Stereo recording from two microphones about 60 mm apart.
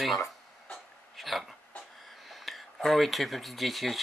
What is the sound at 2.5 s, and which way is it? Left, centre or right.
Speech, centre.